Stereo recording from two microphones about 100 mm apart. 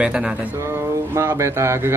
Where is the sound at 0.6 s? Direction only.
25° right (ahead or behind).